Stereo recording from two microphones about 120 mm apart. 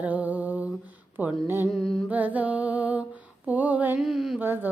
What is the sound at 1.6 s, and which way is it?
Speech, 5° right (ahead or behind).